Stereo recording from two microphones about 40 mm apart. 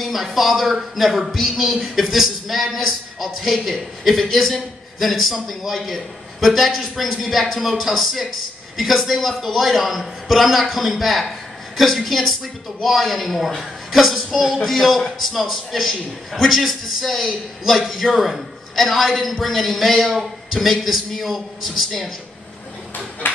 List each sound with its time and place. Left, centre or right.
0.0 s a man's voice: centre
23.2 s speech: left